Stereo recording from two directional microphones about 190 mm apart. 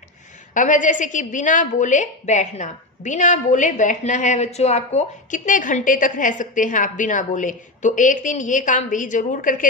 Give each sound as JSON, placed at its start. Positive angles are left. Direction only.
{"t": 0.6, "sound": "a woman's voice", "side_deg": 40}